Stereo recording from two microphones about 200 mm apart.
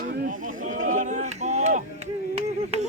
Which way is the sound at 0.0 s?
50° right (ahead or behind).